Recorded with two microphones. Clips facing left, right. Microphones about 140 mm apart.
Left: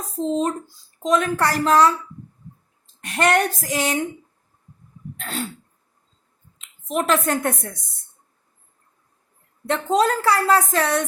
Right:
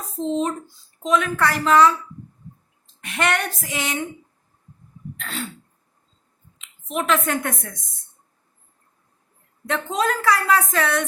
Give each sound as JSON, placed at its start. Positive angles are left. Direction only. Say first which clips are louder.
{"t": 0.2, "sound": "a child's voice", "louder": "left 1 dB", "side_deg": 5}
{"t": 1.0, "sound": "a woman's voice", "louder": "left 1 dB", "side_deg": 40}
{"t": 3.0, "sound": "a woman's voice", "louder": "left 4 dB", "side_deg": 40}
{"t": 5.1, "sound": "throat clearing", "louder": "left 3 dB", "side_deg": 40}
{"t": 6.6, "sound": "a woman's voice", "louder": "left 3 dB", "side_deg": 40}
{"t": 9.6, "sound": "a woman's voice", "louder": "left 4 dB", "side_deg": 35}